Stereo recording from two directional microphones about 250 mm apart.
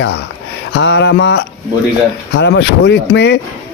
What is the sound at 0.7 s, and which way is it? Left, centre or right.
A man's voice, left.